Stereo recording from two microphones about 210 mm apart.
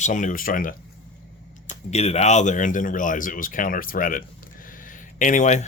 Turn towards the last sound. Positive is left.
turn(degrees=35)  # may be behind; listen again after turning